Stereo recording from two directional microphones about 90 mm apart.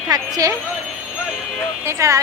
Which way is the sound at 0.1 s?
45° right (ahead or behind).